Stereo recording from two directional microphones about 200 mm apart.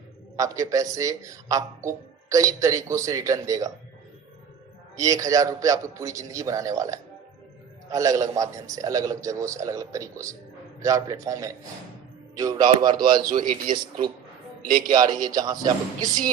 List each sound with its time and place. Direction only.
0.3 s speech: 15° right (ahead or behind)
4.9 s a man's voice: 15° right (ahead or behind)
13.4 s speech: 40° right (ahead or behind)
14.8 s a man's voice: 20° right (ahead or behind)